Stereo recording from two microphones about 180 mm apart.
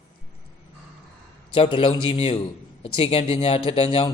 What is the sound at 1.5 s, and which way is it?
Speech, 30° left (ahead or behind).